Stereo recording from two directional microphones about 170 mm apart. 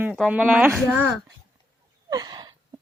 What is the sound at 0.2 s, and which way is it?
Child singing, 5° right (ahead or behind).